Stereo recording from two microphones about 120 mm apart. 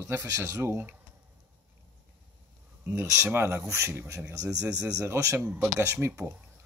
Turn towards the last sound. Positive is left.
turn(degrees=-20)  # may be behind; listen again after turning